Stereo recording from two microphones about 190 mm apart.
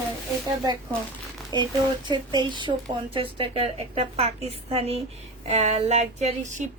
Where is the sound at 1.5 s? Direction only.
20° right (ahead or behind).